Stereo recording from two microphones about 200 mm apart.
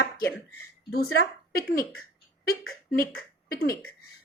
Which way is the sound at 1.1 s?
55° left (ahead or behind).